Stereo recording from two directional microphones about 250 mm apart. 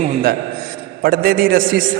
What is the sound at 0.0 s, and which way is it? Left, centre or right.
A man's voice, right.